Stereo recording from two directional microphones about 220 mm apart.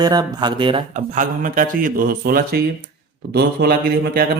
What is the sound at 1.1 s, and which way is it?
Speech, 35° right (ahead or behind).